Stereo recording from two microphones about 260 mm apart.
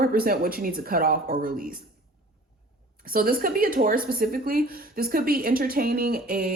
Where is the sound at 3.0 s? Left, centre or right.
Right.